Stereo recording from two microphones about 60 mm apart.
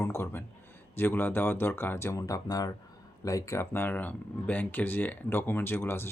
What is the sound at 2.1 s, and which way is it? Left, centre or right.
Speech, left.